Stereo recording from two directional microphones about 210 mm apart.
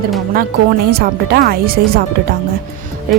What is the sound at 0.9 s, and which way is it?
Speech, 50° right (ahead or behind).